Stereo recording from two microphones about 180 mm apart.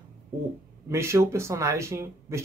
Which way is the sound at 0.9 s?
15° right (ahead or behind).